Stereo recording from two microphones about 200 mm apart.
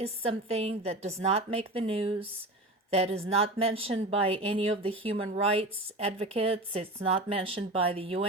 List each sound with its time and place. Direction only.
0.0 s a woman's voice: 30° right (ahead or behind)